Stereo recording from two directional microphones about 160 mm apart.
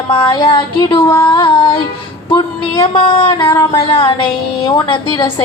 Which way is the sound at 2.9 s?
30° left (ahead or behind).